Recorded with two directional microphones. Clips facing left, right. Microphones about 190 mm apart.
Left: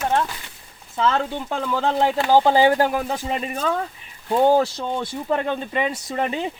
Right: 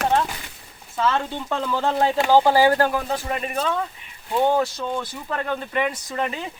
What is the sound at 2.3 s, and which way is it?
Speech, 20° left (ahead or behind).